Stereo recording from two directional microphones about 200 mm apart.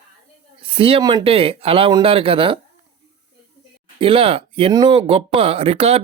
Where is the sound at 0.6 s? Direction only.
25° right (ahead or behind).